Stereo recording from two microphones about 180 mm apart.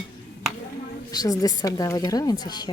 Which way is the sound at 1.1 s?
20° left (ahead or behind).